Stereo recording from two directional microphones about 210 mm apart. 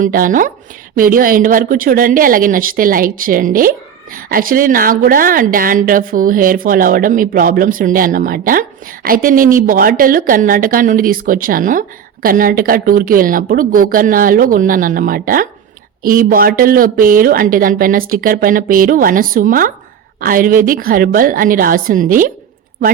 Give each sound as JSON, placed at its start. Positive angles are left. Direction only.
{"t": 0.0, "sound": "a woman's voice", "side_deg": -40}